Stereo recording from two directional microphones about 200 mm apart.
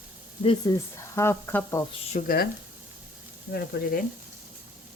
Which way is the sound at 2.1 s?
45° left (ahead or behind).